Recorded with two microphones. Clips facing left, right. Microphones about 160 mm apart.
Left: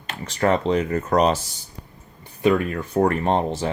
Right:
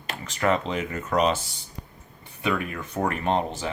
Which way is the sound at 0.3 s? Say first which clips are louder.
Left 5 dB; 35° left (ahead or behind).